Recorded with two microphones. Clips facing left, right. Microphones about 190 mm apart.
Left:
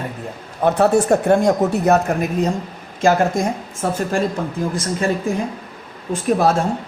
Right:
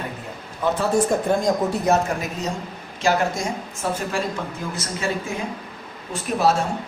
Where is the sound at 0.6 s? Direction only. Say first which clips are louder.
Left 5 dB; 65° left (ahead or behind).